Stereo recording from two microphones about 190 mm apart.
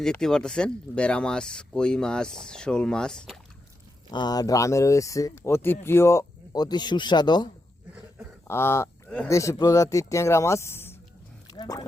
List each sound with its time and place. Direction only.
0.0 s speech: 5° left (ahead or behind)
4.1 s speech: 20° left (ahead or behind)
11.4 s a sound: 20° left (ahead or behind)